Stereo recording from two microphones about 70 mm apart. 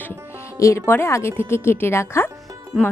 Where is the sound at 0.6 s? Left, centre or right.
Left.